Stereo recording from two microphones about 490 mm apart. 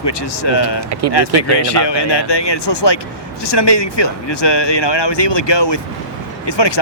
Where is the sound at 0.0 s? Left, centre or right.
Left.